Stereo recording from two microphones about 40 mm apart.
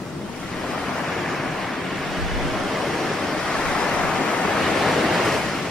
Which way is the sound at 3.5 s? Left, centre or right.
Centre.